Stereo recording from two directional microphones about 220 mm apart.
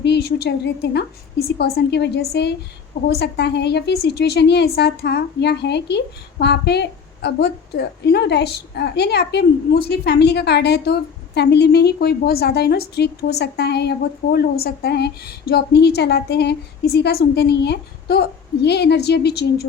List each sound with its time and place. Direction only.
0.0 s a woman's voice: 50° left (ahead or behind)